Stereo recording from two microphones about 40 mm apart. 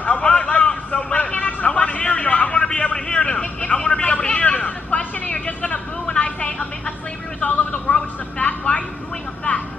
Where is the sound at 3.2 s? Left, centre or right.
Left.